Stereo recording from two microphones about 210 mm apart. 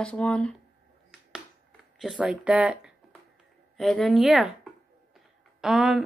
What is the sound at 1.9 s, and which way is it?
A woman's voice, 5° right (ahead or behind).